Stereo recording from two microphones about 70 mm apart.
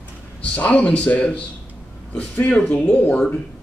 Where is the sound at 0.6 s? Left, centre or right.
Centre.